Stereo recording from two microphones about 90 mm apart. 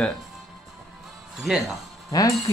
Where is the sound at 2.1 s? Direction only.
45° left (ahead or behind).